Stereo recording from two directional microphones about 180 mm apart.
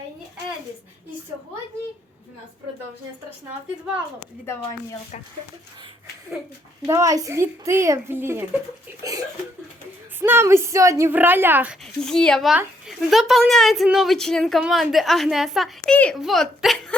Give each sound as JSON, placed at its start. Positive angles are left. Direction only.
{"t": 6.8, "sound": "speech", "side_deg": -20}
{"t": 10.2, "sound": "speech", "side_deg": -10}
{"t": 11.9, "sound": "speech", "side_deg": 5}